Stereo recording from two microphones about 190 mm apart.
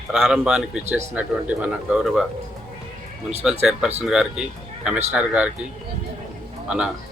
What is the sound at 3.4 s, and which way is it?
Speech, 5° right (ahead or behind).